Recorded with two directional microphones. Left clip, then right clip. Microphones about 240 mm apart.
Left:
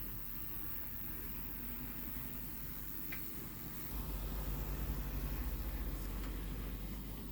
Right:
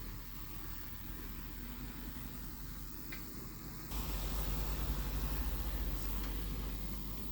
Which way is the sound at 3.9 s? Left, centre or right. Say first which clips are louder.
Right 7 dB; right.